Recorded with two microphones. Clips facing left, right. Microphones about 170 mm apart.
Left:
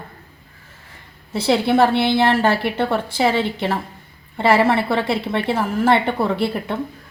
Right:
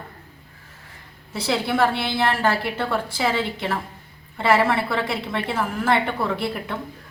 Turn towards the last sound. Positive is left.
turn(degrees=30)  # may be behind; listen again after turning